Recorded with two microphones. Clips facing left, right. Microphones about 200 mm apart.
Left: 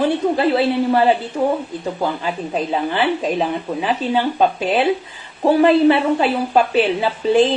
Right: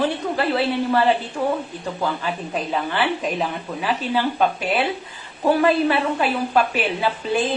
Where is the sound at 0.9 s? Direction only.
20° left (ahead or behind).